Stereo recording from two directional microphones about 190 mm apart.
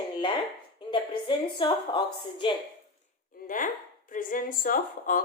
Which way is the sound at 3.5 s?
45° left (ahead or behind).